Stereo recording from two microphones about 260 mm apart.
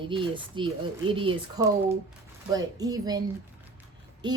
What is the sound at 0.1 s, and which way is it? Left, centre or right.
Speech, centre.